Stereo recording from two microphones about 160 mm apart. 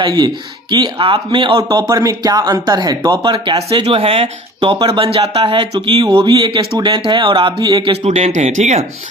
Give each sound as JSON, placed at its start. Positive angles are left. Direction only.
{"t": 0.0, "sound": "a man's voice", "side_deg": -30}
{"t": 8.0, "sound": "speech", "side_deg": -40}